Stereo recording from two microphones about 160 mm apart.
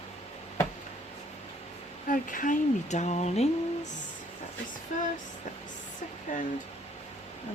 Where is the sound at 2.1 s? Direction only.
55° left (ahead or behind).